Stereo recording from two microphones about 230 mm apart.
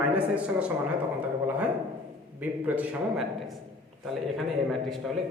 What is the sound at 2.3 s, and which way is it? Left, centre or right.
A man's voice, centre.